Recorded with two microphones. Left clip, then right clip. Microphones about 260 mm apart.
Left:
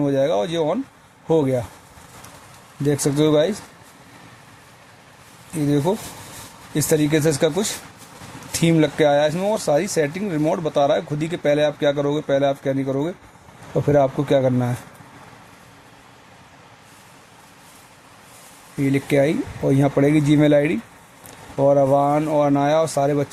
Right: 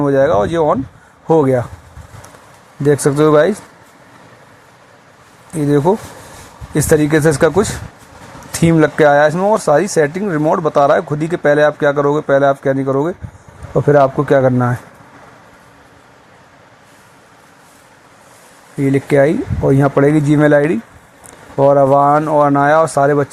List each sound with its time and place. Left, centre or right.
0.0 s speech: centre
2.8 s speech: centre
5.6 s speech: centre
18.9 s speech: centre